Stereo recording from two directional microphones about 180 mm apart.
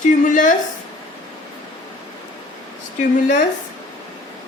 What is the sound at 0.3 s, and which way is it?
Speech, 45° left (ahead or behind).